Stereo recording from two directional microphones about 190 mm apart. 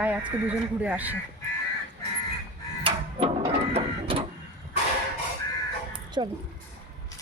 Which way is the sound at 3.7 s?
30° right (ahead or behind).